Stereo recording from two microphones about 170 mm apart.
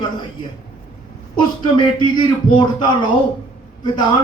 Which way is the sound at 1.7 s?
30° left (ahead or behind).